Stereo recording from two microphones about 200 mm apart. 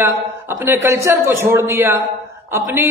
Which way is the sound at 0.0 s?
10° right (ahead or behind).